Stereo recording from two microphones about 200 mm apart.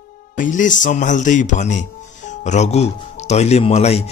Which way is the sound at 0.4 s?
40° left (ahead or behind).